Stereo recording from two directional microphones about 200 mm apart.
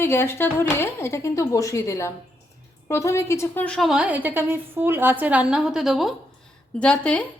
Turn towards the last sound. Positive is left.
turn(degrees=5)  # may be behind; listen again after turning